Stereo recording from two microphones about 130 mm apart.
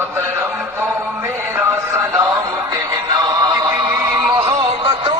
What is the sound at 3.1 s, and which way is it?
Music, 30° right (ahead or behind).